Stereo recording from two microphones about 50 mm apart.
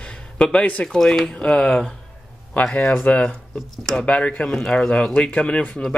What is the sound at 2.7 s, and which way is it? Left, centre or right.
Speech, left.